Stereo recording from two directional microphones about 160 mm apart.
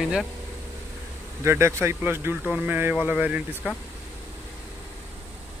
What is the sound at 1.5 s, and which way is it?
Speech, 15° right (ahead or behind).